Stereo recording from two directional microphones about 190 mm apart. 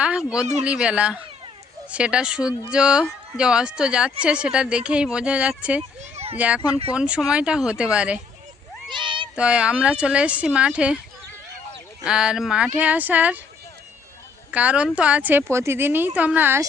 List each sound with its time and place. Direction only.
0.0 s speech: 5° right (ahead or behind)
6.0 s a sound: 35° right (ahead or behind)
6.3 s speech: 5° right (ahead or behind)
8.9 s cat: 25° right (ahead or behind)
9.3 s speech: 5° right (ahead or behind)
12.0 s speech: 5° right (ahead or behind)
14.5 s speech: 5° right (ahead or behind)